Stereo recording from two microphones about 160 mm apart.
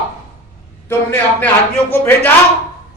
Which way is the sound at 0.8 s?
10° left (ahead or behind).